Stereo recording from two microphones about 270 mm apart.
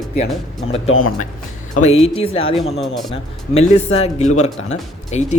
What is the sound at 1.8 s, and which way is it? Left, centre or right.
A man's voice, left.